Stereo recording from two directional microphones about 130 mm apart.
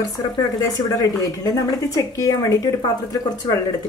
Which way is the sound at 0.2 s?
30° left (ahead or behind).